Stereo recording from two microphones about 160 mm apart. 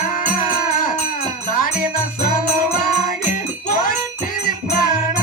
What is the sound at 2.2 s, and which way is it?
Music, 60° left (ahead or behind).